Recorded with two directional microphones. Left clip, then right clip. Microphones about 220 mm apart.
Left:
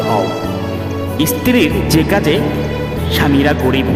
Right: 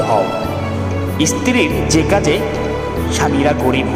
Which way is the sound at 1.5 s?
45° left (ahead or behind).